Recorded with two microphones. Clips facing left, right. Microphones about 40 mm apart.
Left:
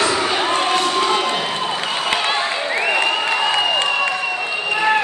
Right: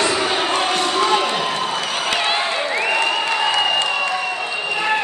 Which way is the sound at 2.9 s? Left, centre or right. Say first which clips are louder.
Left 1 dB; centre.